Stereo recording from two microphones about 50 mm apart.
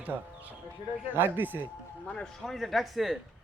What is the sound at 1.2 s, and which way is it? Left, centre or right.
Speech, right.